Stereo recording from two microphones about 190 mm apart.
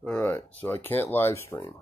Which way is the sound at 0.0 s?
10° left (ahead or behind).